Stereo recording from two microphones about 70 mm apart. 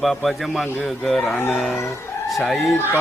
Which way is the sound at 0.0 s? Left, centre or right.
Centre.